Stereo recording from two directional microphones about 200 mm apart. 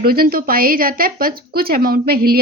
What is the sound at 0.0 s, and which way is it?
A woman's voice, 50° right (ahead or behind).